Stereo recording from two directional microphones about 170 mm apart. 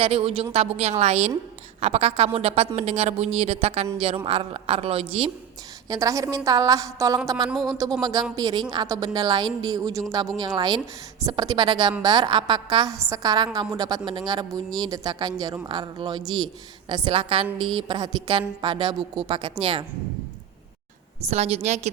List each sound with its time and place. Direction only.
0.0 s a woman's voice: 35° right (ahead or behind)
5.9 s a woman's voice: 20° right (ahead or behind)
7.5 s speech: centre (ahead or behind)
8.0 s a woman's voice: 20° right (ahead or behind)
16.2 s speech: centre (ahead or behind)
16.9 s a woman's voice: 30° right (ahead or behind)
21.2 s a woman's voice: 40° right (ahead or behind)